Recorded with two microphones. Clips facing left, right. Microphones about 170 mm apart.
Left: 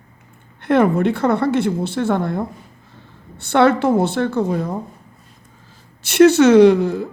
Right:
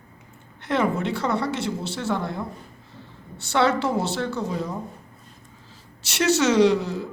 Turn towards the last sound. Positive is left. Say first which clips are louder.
# left 7 dB
turn(degrees=55)  # may be behind; listen again after turning